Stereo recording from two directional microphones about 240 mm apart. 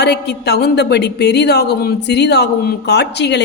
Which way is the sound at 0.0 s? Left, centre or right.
Left.